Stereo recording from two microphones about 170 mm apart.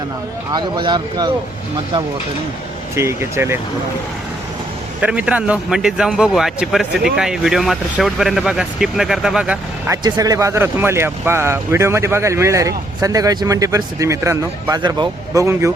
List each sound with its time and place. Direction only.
0.5 s speech: 25° right (ahead or behind)
2.9 s speech: 15° right (ahead or behind)
4.9 s speech: 5° right (ahead or behind)
9.9 s speech: 20° right (ahead or behind)